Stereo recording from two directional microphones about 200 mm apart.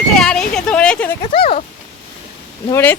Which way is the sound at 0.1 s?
5° left (ahead or behind).